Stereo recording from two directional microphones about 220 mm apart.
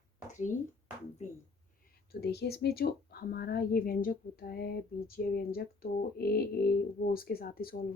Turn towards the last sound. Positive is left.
turn(degrees=45)  # may be behind; listen again after turning